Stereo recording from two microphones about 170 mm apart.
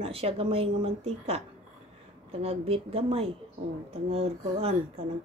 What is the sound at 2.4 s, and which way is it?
A woman's voice, 35° right (ahead or behind).